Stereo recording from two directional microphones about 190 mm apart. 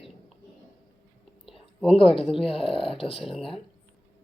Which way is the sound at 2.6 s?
30° left (ahead or behind).